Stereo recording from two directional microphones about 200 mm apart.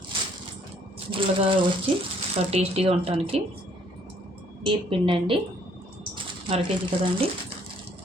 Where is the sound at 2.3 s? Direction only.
30° right (ahead or behind).